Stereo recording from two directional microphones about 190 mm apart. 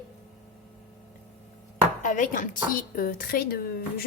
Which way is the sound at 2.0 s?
45° left (ahead or behind).